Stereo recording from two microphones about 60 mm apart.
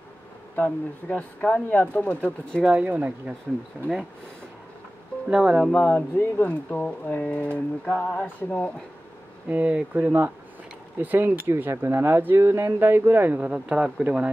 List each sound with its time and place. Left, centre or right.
0.6 s speech: left
2.6 s speech: right
3.8 s speech: centre
5.3 s speech: right
5.7 s speech: centre
6.1 s speech: left
9.5 s speech: right
12.4 s a sound: right
12.8 s speech: right
13.4 s speech: right